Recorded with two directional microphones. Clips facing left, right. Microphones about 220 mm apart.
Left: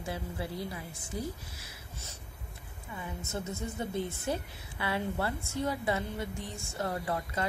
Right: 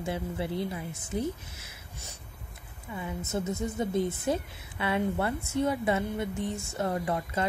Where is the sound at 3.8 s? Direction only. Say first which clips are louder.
Right 6 dB; 20° right (ahead or behind).